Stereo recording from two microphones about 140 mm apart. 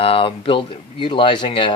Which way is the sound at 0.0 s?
40° left (ahead or behind).